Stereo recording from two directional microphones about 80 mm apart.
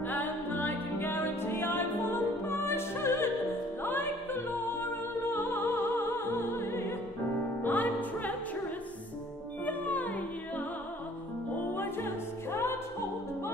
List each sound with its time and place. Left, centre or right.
0.0 s music: left
9.7 s music: centre
11.7 s music: left